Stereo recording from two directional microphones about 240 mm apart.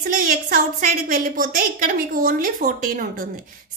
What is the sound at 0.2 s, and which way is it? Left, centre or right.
A woman's voice, right.